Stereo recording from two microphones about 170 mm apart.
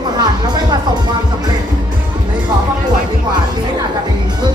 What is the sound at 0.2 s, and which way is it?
Music, 25° right (ahead or behind).